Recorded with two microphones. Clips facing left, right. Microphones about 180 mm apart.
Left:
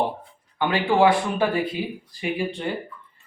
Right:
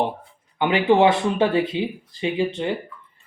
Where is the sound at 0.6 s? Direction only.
20° right (ahead or behind).